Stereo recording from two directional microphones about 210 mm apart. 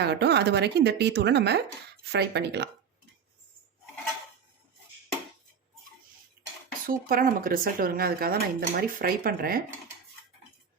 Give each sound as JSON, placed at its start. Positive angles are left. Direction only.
{"t": 0.0, "sound": "speech", "side_deg": -55}
{"t": 6.8, "sound": "speech", "side_deg": -45}